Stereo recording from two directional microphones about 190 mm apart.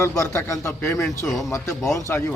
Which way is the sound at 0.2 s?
15° left (ahead or behind).